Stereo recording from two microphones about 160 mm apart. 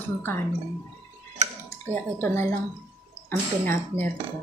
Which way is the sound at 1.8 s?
10° left (ahead or behind).